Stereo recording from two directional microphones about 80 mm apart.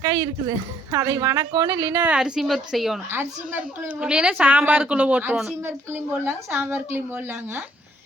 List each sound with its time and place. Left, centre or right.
0.0 s speech: right
0.9 s speech: right
2.0 s a woman's voice: centre
3.1 s a woman's voice: right
4.0 s a woman's voice: centre
5.6 s a woman's voice: right